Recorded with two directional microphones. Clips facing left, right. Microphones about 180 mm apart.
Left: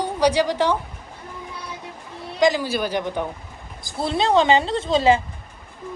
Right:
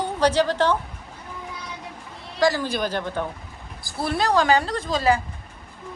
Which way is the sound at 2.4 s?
15° left (ahead or behind).